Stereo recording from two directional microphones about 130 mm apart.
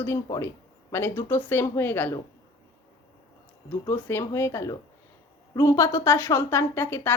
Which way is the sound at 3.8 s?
15° left (ahead or behind).